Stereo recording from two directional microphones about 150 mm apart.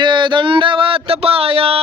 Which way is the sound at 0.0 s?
30° right (ahead or behind).